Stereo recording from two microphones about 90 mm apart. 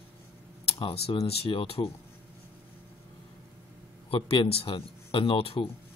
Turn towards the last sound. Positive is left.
turn(degrees=90)